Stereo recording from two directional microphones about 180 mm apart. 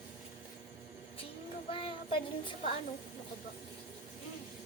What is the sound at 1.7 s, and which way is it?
Child singing, 30° left (ahead or behind).